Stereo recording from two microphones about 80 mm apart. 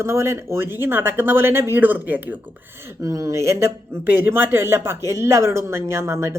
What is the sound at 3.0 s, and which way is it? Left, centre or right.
Speech, right.